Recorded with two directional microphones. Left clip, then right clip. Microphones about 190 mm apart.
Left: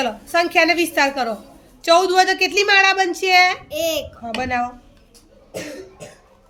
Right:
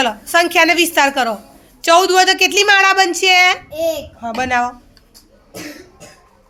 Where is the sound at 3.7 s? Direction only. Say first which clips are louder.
Right 3 dB; 45° left (ahead or behind).